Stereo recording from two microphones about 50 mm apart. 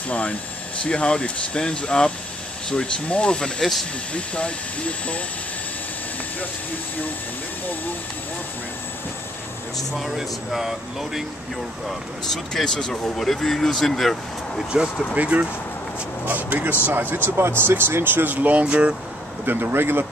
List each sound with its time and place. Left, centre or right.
0.1 s speech: left
4.1 s speech: left
9.8 s speech: centre
12.3 s speech: centre
15.1 s speech: right
19.4 s speech: right